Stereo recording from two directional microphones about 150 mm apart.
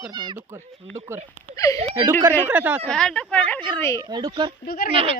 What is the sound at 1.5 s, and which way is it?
Speech, 20° left (ahead or behind).